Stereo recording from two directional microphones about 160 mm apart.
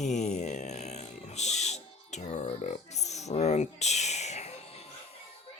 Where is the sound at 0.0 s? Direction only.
45° left (ahead or behind).